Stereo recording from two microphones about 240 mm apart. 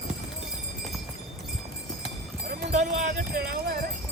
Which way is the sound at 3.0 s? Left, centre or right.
Right.